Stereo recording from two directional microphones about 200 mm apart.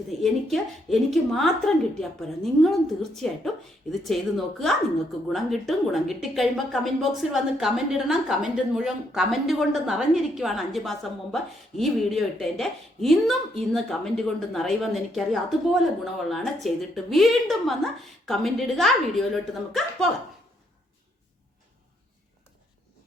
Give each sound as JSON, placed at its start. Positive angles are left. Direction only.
{"t": 0.1, "sound": "a woman's voice", "side_deg": 0}